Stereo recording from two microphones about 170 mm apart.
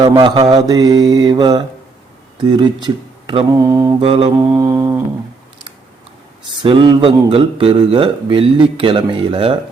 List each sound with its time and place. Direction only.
0.0 s mantra: 30° right (ahead or behind)
4.0 s speech: 35° right (ahead or behind)
4.4 s mantra: 20° right (ahead or behind)
6.6 s speech: 25° right (ahead or behind)